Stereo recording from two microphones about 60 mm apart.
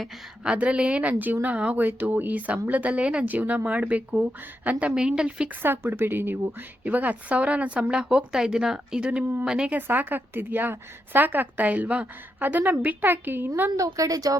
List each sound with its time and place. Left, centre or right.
0.4 s speech: centre
4.9 s a woman's voice: centre
5.6 s a woman's voice: right
6.8 s a woman's voice: right
9.7 s a woman's voice: right
13.7 s speech: right